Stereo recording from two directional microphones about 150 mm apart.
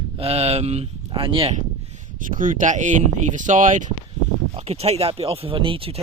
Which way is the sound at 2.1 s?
65° right (ahead or behind).